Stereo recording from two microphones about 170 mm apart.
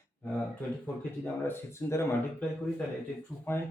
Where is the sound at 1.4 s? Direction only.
15° left (ahead or behind).